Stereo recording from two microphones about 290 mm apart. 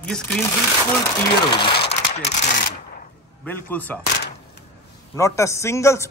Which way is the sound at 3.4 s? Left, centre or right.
Centre.